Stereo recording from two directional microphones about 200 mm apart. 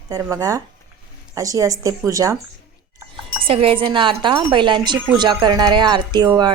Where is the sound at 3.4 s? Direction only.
30° right (ahead or behind).